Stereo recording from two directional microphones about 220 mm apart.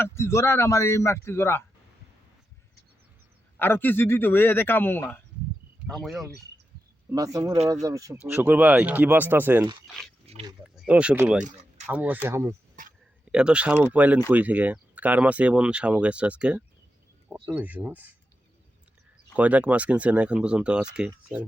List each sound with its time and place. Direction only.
0.0 s a man's voice: 10° left (ahead or behind)
3.6 s a man's voice: 10° left (ahead or behind)
7.1 s speech: 15° right (ahead or behind)
10.2 s speech: 25° right (ahead or behind)
10.8 s speech: 5° right (ahead or behind)
12.8 s a sound: 35° right (ahead or behind)
13.3 s speech: 5° right (ahead or behind)
19.4 s speech: 5° right (ahead or behind)